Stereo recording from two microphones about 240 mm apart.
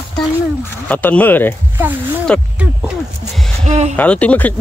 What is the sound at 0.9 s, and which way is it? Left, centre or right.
Speech, centre.